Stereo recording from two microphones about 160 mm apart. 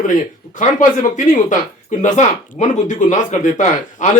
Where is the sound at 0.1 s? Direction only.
50° left (ahead or behind).